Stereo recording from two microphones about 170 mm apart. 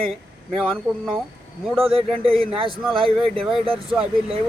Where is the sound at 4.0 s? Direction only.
35° right (ahead or behind).